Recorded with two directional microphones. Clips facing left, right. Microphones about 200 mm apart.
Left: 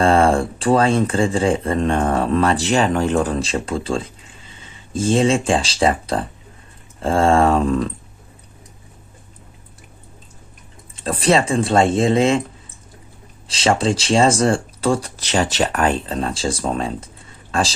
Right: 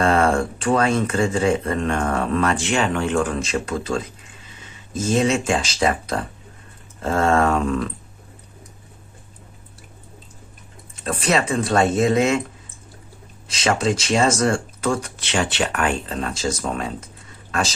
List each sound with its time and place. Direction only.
0.0 s speech: 30° left (ahead or behind)
10.9 s speech: 30° left (ahead or behind)
13.5 s speech: 30° left (ahead or behind)